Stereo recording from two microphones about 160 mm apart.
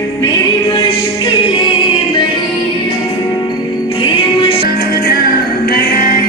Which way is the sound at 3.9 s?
30° left (ahead or behind).